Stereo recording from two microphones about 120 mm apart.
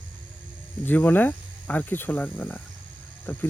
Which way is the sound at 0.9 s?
15° left (ahead or behind).